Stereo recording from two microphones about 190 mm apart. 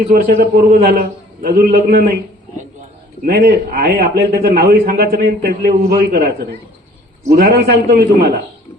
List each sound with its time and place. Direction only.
0.1 s a man's voice: 55° right (ahead or behind)
3.2 s a man's voice: 55° right (ahead or behind)
7.3 s a man's voice: 55° right (ahead or behind)